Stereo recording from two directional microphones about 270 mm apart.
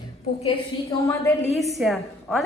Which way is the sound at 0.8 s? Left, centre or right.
Centre.